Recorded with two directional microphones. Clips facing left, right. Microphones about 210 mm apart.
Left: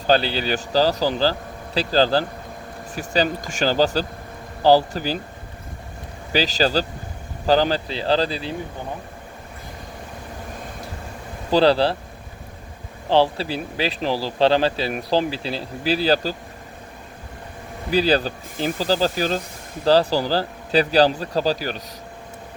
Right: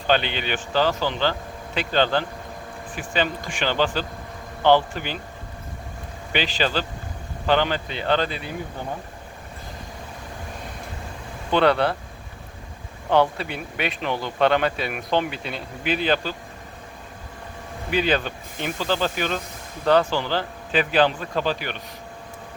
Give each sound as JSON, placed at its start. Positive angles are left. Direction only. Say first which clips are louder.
{"t": 0.1, "sound": "speech", "louder": "left 3 dB", "side_deg": 35}
{"t": 6.3, "sound": "speech", "louder": "left 4 dB", "side_deg": 40}
{"t": 11.5, "sound": "speech", "louder": "left 3 dB", "side_deg": 30}
{"t": 13.1, "sound": "speech", "louder": "left 2 dB", "side_deg": 30}
{"t": 17.9, "sound": "speech", "louder": "left 4 dB", "side_deg": 35}